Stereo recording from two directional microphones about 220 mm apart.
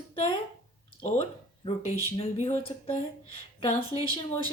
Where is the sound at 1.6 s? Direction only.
30° left (ahead or behind).